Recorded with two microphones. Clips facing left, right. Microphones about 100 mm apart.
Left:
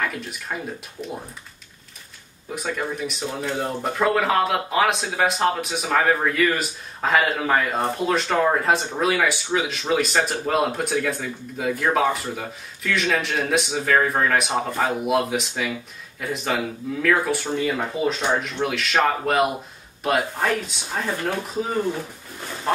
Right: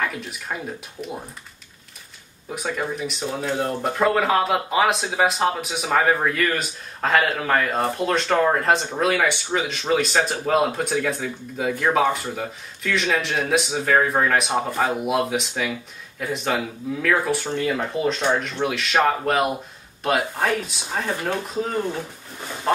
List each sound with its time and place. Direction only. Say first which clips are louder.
0.0 s speech: even; centre (ahead or behind)
2.5 s speech: right 1 dB; centre (ahead or behind)